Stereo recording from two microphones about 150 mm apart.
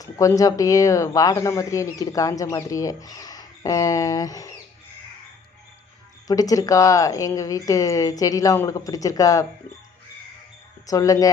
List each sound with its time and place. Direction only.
0.0 s speech: 20° left (ahead or behind)
6.2 s speech: 25° left (ahead or behind)
10.8 s speech: 25° left (ahead or behind)